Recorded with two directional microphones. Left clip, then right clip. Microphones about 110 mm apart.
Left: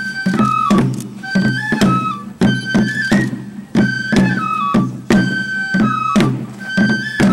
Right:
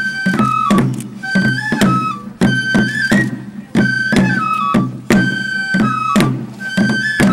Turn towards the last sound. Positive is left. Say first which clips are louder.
# right 1 dB
turn(degrees=-20)  # may be behind; listen again after turning